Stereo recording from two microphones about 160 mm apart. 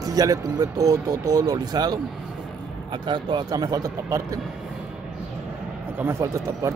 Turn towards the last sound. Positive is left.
turn(degrees=-20)  # may be behind; listen again after turning